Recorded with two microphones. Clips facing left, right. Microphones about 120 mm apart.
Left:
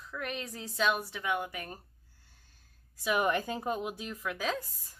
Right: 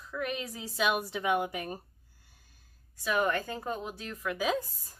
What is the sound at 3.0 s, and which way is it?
A woman's voice, 15° left (ahead or behind).